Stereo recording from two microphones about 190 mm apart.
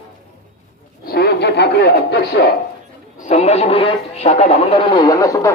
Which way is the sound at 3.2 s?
35° left (ahead or behind).